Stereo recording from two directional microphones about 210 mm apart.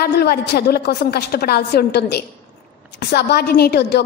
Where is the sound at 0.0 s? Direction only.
50° left (ahead or behind).